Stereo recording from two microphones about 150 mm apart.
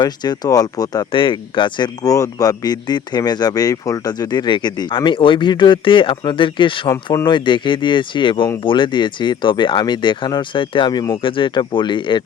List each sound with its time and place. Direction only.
0.0 s speech: 30° left (ahead or behind)
6.9 s speech: 20° left (ahead or behind)
7.3 s speech: 30° left (ahead or behind)